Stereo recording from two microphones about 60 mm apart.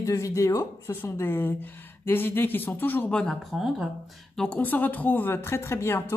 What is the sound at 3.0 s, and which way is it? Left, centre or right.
Speech, centre.